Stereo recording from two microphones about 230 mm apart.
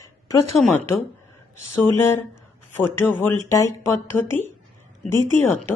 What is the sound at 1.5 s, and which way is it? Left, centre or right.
Speech, left.